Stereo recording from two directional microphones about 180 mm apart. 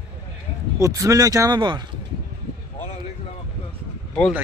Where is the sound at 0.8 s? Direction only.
20° right (ahead or behind).